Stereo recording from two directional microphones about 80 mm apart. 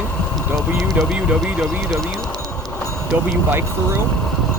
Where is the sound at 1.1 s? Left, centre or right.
Centre.